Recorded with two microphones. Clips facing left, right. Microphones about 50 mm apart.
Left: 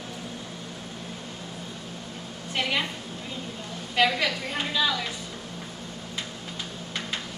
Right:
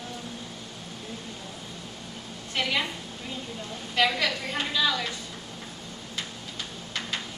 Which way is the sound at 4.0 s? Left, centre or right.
Centre.